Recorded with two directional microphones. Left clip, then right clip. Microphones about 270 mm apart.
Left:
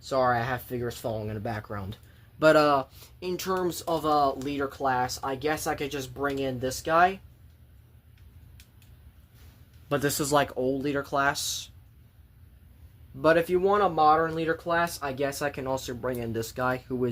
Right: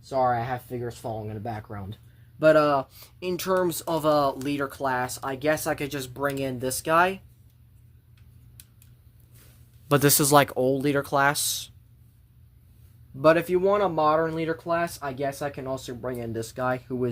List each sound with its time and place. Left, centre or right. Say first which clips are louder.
0.1 s speech: right 1 dB; centre; by 7.2 s right
9.9 s speech: right 6 dB; right
13.2 s speech: right 2 dB; right